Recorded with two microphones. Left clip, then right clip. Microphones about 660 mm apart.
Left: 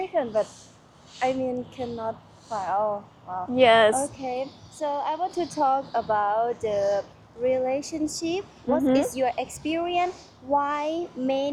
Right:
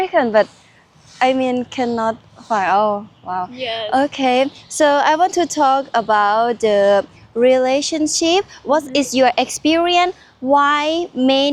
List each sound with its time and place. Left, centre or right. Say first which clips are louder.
0.0 s a woman's voice: right 11 dB; right
3.6 s speech: left 7 dB; left
3.9 s a woman's voice: right 13 dB; right
8.7 s a woman's voice: right 6 dB; right